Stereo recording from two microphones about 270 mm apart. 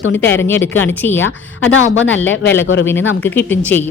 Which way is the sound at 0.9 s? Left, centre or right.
Centre.